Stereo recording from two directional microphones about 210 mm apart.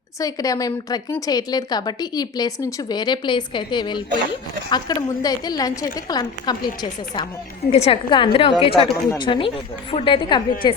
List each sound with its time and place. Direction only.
0.2 s a woman's voice: 15° left (ahead or behind)
7.7 s a woman's voice: 25° left (ahead or behind)